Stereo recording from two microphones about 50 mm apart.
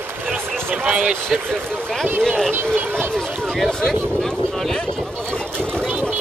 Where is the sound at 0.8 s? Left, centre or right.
Centre.